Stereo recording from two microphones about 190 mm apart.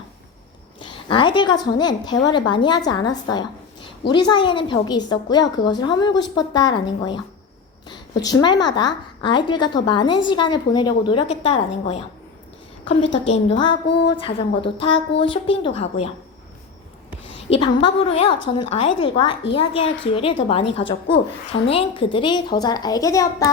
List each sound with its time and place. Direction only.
0.8 s a woman's voice: 25° left (ahead or behind)
13.2 s a woman's voice: 35° left (ahead or behind)
17.6 s a woman's voice: 30° left (ahead or behind)